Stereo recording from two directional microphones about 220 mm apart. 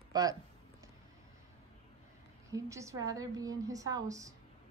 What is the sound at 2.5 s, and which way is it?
A woman's voice, 15° right (ahead or behind).